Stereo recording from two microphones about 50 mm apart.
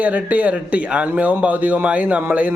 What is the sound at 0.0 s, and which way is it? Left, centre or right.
Speech, right.